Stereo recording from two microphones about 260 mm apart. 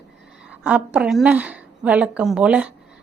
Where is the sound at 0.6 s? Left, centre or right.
Centre.